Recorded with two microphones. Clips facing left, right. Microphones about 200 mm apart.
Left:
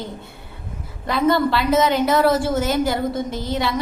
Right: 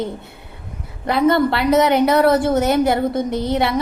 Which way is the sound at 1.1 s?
60° right (ahead or behind).